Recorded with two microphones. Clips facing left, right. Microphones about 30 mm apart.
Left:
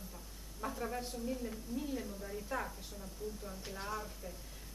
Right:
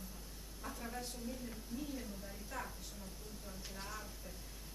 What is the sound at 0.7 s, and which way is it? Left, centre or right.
A woman's voice, centre.